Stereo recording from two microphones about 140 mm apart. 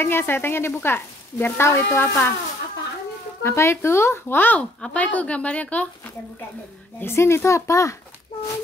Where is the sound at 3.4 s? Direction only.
20° left (ahead or behind).